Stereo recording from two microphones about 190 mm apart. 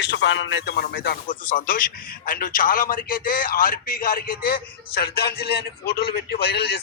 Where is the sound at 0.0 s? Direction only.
70° left (ahead or behind).